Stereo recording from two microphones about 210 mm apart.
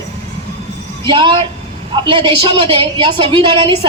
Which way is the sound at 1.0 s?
20° right (ahead or behind).